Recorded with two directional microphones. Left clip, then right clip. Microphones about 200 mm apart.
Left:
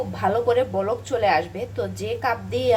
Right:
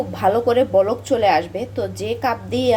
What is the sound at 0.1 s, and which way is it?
A woman's voice, 20° right (ahead or behind).